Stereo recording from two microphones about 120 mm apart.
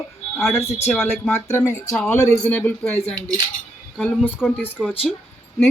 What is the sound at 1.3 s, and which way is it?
Speech, 20° left (ahead or behind).